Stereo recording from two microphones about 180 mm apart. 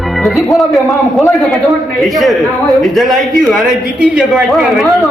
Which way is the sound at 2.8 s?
Centre (ahead or behind).